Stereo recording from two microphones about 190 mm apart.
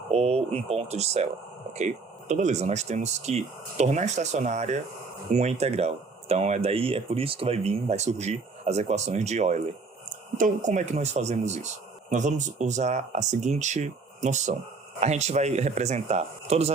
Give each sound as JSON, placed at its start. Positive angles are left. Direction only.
{"t": 0.1, "sound": "speech", "side_deg": -35}